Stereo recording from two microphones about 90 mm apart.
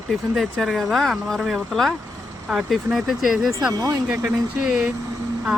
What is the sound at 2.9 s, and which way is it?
Speech, 5° right (ahead or behind).